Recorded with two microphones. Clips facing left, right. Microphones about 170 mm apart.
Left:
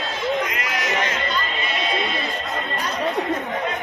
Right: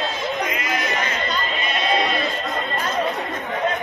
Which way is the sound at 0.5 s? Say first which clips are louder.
Right 2 dB; 75° left (ahead or behind).